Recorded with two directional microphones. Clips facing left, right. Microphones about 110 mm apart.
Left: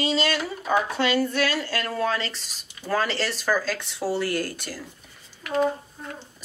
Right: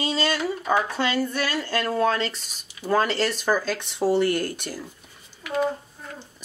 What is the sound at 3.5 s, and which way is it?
Speech, 20° right (ahead or behind).